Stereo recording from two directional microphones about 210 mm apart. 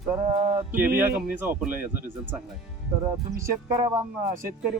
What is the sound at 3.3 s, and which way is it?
Speech, 15° right (ahead or behind).